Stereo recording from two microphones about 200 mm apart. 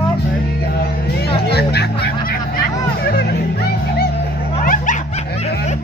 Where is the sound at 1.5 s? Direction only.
55° left (ahead or behind).